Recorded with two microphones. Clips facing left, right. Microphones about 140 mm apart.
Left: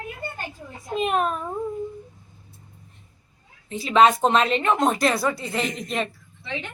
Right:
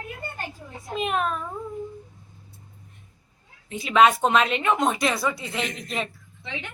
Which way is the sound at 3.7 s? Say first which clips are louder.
Left 1 dB; 35° left (ahead or behind).